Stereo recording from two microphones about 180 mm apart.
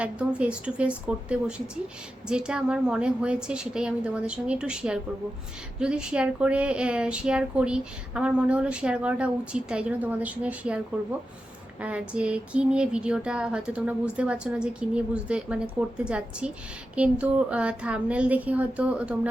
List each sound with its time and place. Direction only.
0.0 s a woman's voice: 5° right (ahead or behind)
11.8 s a woman's voice: 5° right (ahead or behind)